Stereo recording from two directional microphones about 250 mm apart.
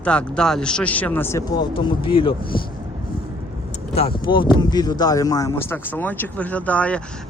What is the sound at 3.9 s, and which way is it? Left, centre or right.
Speech, left.